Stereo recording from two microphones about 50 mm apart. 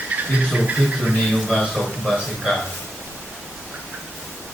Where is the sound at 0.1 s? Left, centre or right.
Right.